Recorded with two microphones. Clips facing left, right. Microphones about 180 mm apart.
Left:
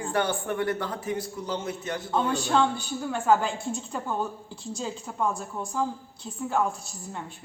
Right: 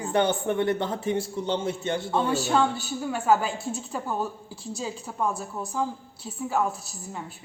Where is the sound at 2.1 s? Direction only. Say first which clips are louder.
Even; 5° right (ahead or behind).